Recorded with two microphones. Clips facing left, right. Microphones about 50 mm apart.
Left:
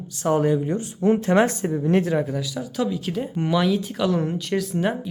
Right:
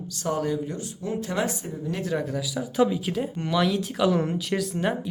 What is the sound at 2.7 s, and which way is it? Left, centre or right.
Speech, centre.